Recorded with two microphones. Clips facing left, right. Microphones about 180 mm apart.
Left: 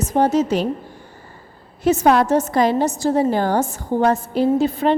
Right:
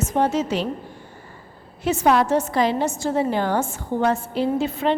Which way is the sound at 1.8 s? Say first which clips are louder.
Left 3 dB; 40° left (ahead or behind).